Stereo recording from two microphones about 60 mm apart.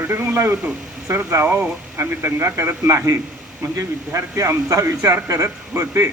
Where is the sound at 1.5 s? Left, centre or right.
Right.